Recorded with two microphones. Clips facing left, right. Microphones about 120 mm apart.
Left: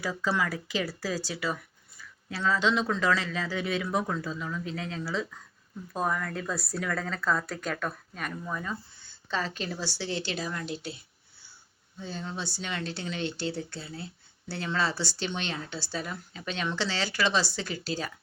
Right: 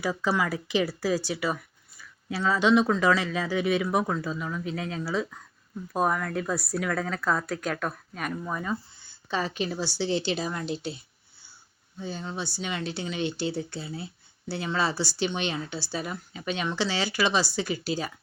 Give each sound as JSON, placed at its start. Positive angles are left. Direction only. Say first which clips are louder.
{"t": 0.0, "sound": "speech", "louder": "right 3 dB", "side_deg": -20}
{"t": 8.4, "sound": "speech", "louder": "right 3 dB", "side_deg": -25}
{"t": 9.3, "sound": "speech", "louder": "right 4 dB", "side_deg": -15}
{"t": 11.9, "sound": "speech", "louder": "right 3 dB", "side_deg": -10}